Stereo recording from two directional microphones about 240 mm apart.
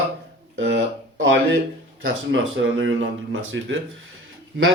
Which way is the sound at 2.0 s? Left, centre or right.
Right.